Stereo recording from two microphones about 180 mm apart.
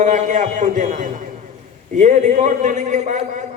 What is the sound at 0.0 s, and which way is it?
A man's voice, 45° right (ahead or behind).